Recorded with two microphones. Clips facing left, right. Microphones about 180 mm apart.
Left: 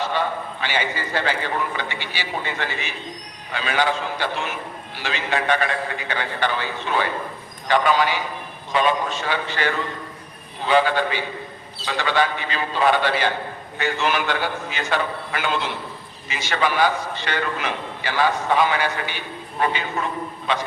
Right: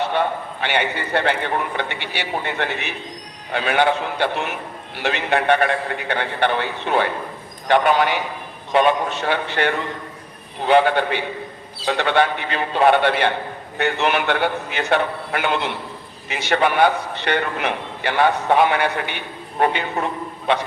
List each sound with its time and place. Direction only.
0.0 s a man's voice: 60° right (ahead or behind)